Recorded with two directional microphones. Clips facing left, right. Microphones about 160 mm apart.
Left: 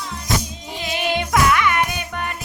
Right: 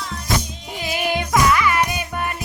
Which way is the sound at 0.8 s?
Centre (ahead or behind).